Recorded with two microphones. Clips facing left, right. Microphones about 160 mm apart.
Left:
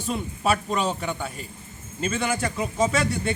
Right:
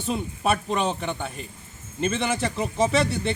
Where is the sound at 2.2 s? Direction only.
25° right (ahead or behind).